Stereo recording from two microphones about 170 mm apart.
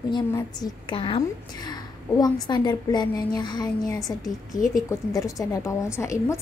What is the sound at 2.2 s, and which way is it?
A woman's voice, 25° left (ahead or behind).